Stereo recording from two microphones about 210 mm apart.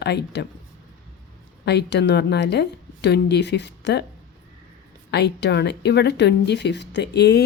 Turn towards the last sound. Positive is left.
turn(degrees=50)  # may be behind; listen again after turning